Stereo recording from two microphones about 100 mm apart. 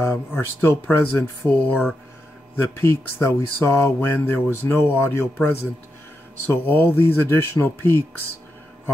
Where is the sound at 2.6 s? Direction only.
25° left (ahead or behind).